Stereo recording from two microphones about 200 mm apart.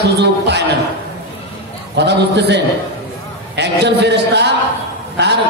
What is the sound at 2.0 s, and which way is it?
A man's voice, 60° right (ahead or behind).